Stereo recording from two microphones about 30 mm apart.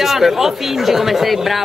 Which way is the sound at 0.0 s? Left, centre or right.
Centre.